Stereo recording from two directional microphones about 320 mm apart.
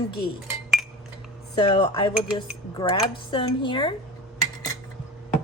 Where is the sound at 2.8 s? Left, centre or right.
Centre.